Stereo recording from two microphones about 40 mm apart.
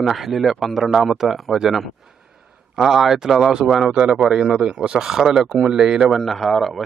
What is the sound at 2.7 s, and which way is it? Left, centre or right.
Speech, centre.